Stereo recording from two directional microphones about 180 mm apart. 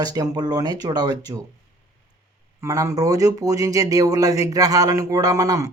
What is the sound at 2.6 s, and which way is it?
Speech, 15° right (ahead or behind).